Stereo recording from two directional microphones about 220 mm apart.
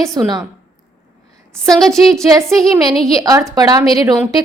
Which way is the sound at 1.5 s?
Centre (ahead or behind).